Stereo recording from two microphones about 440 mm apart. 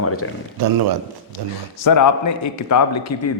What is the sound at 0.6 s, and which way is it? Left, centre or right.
Speech, right.